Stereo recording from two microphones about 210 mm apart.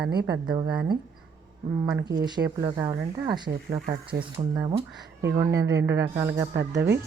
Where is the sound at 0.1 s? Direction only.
20° right (ahead or behind).